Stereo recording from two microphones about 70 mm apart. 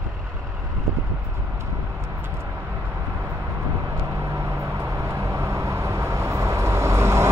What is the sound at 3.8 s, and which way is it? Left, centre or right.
Vehicle, right.